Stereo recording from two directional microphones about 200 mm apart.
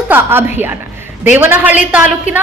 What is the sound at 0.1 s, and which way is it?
A woman's voice, 10° right (ahead or behind).